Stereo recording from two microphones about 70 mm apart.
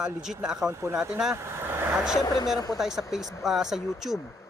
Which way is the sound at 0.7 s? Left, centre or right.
Right.